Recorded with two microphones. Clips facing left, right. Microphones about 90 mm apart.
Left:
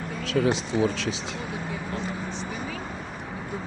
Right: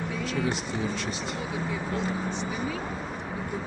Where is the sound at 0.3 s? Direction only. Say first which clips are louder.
Left 8 dB; 85° left.